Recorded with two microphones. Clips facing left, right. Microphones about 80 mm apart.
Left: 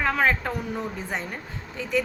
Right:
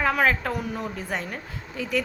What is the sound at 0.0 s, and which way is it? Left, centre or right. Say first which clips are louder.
Speech: right 1 dB; centre.